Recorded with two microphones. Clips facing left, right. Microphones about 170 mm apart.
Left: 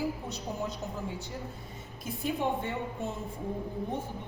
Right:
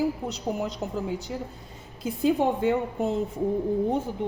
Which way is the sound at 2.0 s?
85° right.